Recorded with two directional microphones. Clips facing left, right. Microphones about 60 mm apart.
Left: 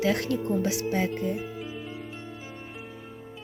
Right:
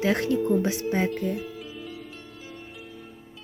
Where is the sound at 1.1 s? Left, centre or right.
Left.